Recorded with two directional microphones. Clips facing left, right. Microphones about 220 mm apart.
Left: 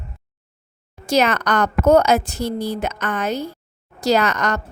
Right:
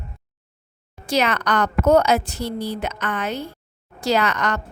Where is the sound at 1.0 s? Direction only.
45° left (ahead or behind).